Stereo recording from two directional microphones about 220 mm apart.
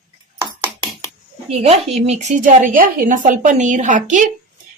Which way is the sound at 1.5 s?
30° right (ahead or behind).